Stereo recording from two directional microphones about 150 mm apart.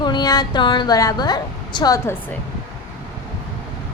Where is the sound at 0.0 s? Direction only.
30° left (ahead or behind).